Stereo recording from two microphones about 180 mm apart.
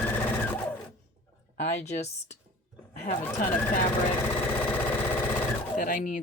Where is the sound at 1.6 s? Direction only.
40° left (ahead or behind).